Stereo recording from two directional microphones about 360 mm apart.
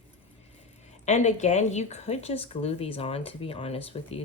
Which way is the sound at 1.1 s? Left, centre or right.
Centre.